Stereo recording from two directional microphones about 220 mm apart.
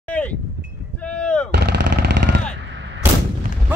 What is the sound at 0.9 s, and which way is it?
Artillery fire, 5° left (ahead or behind).